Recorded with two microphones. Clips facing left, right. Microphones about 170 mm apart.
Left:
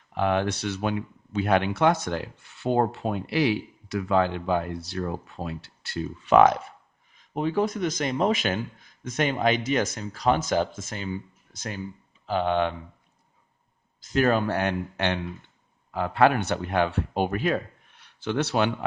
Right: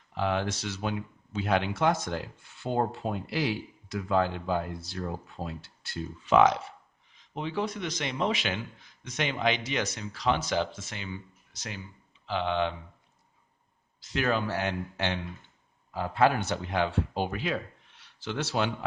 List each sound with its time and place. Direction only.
0.1 s speech: 60° left (ahead or behind)
14.0 s speech: 45° left (ahead or behind); by 18.9 s 60° left (ahead or behind)